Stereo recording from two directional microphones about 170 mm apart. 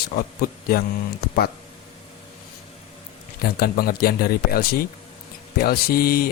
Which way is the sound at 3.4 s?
65° left (ahead or behind).